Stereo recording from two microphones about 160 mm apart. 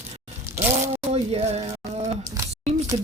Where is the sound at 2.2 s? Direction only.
20° right (ahead or behind).